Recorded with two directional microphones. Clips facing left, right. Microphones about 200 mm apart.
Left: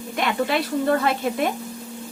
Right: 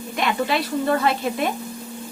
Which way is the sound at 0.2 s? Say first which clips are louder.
Even; 50° left (ahead or behind).